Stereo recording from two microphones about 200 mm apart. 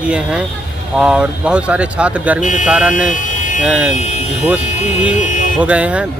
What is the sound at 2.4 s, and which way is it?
Speech, 40° left (ahead or behind).